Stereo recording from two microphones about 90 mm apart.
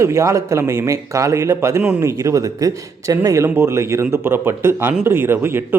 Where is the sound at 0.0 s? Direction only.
35° right (ahead or behind).